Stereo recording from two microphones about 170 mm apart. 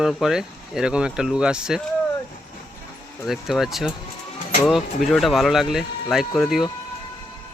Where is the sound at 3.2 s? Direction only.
Centre (ahead or behind).